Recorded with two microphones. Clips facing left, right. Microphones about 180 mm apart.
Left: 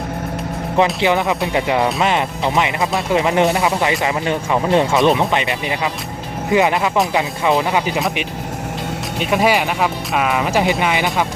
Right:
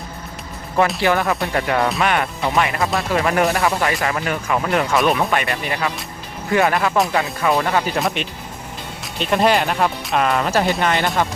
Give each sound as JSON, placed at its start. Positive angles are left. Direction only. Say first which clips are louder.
{"t": 0.9, "sound": "speech", "louder": "left 2 dB", "side_deg": 20}
{"t": 9.1, "sound": "speech", "louder": "even", "side_deg": 10}